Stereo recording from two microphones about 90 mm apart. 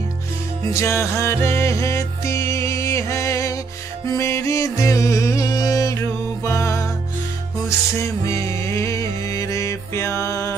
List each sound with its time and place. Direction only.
0.7 s music: 35° left (ahead or behind)
8.0 s music: 35° left (ahead or behind)